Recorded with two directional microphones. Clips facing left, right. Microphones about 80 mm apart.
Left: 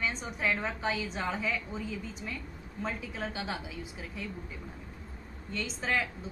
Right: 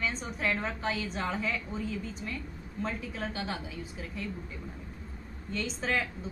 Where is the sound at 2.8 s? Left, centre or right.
Centre.